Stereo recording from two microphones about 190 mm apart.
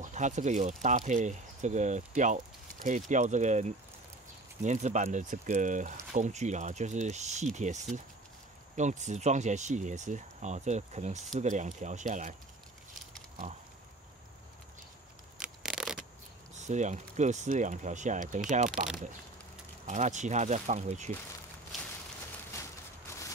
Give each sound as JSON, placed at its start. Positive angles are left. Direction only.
{"t": 0.0, "sound": "speech", "side_deg": -40}
{"t": 15.3, "sound": "a sound", "side_deg": -5}
{"t": 16.5, "sound": "speech", "side_deg": -40}
{"t": 19.9, "sound": "speech", "side_deg": -40}